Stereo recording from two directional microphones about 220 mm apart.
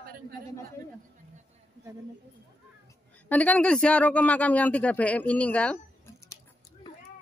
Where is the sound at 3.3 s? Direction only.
5° left (ahead or behind).